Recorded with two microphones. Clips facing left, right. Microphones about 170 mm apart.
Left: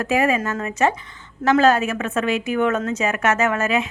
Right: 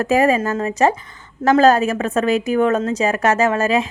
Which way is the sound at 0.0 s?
40° right (ahead or behind).